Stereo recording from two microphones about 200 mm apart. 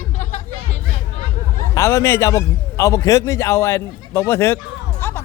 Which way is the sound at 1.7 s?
15° left (ahead or behind).